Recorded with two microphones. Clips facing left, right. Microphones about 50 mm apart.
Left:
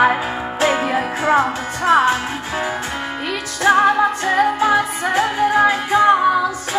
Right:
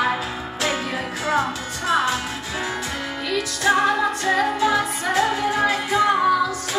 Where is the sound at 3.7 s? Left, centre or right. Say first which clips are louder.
Left 5 dB; left.